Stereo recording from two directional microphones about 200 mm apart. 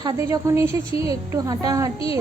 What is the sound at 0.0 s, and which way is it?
A woman's voice, 20° right (ahead or behind).